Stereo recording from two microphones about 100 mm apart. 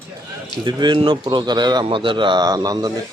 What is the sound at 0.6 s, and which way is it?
Speech, 45° right (ahead or behind).